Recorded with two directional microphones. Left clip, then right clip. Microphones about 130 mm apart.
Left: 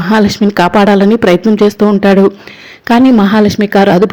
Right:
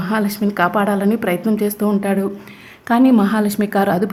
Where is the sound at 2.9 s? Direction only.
35° left (ahead or behind).